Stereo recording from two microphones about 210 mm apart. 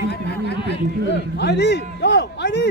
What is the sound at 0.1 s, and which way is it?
Speech, 55° left (ahead or behind).